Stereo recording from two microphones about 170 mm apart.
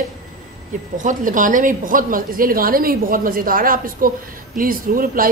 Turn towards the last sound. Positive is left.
turn(degrees=-55)  # may be behind; listen again after turning